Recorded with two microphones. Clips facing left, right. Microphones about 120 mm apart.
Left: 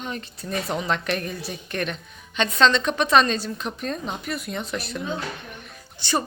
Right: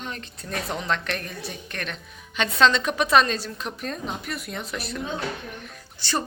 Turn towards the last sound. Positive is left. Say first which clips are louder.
# left 3 dB
turn(degrees=15)  # may be behind; listen again after turning